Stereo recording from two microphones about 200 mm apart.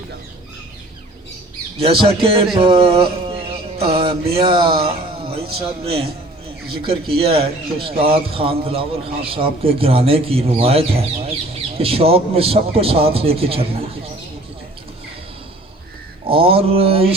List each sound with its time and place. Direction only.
1.8 s speech: 25° right (ahead or behind)
16.2 s speech: 25° right (ahead or behind)